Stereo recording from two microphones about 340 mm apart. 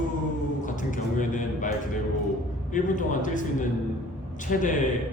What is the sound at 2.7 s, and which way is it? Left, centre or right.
A man's voice, left.